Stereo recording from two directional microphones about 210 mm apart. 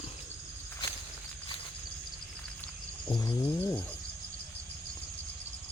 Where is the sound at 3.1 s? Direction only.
15° left (ahead or behind).